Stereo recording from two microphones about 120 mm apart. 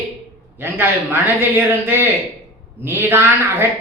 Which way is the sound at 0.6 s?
20° right (ahead or behind).